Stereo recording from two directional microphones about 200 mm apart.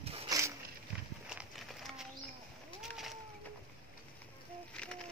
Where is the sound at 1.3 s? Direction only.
Centre (ahead or behind).